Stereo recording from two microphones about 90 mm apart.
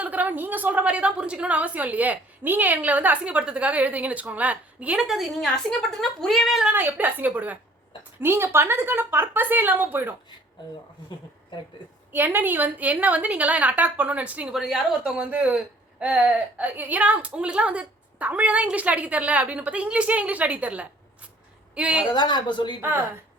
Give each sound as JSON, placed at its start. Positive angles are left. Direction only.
{"t": 0.0, "sound": "speech", "side_deg": -20}
{"t": 4.9, "sound": "a woman's voice", "side_deg": 0}
{"t": 6.7, "sound": "speech", "side_deg": -20}
{"t": 11.8, "sound": "a sound", "side_deg": 65}
{"t": 12.1, "sound": "speech", "side_deg": -20}
{"t": 14.5, "sound": "speech", "side_deg": -5}
{"t": 22.1, "sound": "a woman's voice", "side_deg": 55}